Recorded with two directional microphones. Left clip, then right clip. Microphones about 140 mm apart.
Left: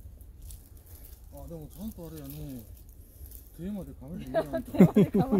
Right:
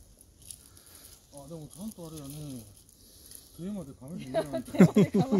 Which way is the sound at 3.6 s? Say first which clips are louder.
Left 1 dB; 5° left (ahead or behind).